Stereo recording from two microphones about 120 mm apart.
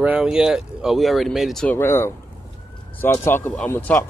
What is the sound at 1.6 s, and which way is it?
Speech, 20° left (ahead or behind).